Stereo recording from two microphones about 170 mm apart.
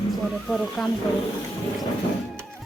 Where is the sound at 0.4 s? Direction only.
Centre (ahead or behind).